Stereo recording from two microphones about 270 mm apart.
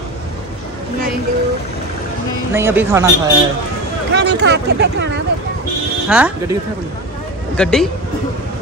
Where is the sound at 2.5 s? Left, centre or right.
Centre.